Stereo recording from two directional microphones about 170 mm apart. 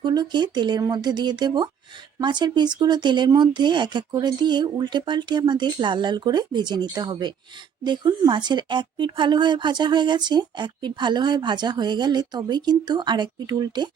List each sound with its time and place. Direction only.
0.0 s speech: 25° right (ahead or behind)